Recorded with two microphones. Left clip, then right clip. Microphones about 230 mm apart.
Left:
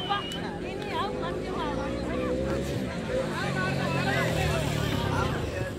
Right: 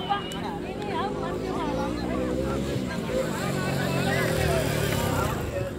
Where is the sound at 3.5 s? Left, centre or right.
Right.